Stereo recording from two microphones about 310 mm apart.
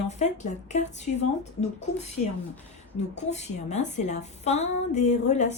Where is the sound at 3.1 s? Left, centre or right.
Left.